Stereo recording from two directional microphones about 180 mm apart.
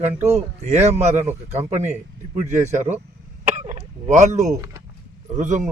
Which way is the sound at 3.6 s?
40° right (ahead or behind).